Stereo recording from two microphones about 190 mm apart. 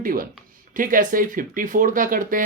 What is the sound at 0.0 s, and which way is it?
Speech, 50° right (ahead or behind).